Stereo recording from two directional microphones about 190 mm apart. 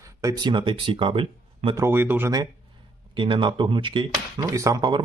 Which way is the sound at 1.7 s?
10° right (ahead or behind).